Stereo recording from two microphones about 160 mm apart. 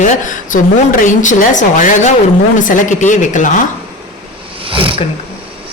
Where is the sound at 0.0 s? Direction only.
50° left (ahead or behind).